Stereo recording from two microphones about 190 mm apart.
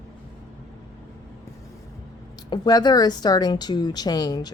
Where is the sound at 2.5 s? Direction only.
20° left (ahead or behind).